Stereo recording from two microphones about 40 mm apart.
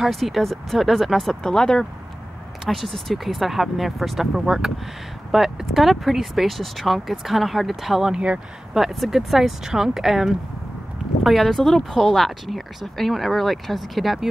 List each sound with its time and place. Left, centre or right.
0.1 s speech: centre
1.4 s speech: centre
2.7 s speech: centre